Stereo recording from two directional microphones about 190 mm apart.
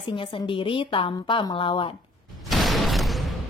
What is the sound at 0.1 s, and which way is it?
A woman's voice, 25° left (ahead or behind).